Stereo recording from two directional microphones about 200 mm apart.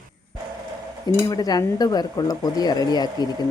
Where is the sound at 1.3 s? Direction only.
20° left (ahead or behind).